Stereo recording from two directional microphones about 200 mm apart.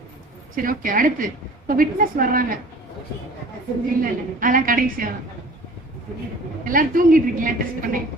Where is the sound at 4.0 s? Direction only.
45° right (ahead or behind).